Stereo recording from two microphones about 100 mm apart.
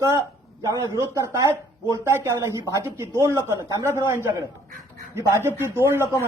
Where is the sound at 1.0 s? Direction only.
30° right (ahead or behind).